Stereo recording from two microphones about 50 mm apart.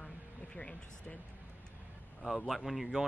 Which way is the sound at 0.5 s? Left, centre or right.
Left.